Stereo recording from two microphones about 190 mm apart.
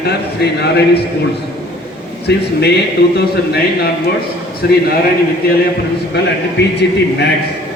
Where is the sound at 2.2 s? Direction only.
60° left (ahead or behind).